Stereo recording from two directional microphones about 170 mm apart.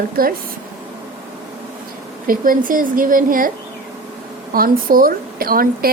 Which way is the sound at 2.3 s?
55° right (ahead or behind).